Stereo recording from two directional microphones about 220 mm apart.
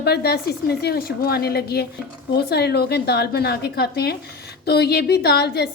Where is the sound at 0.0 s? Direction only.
45° left (ahead or behind).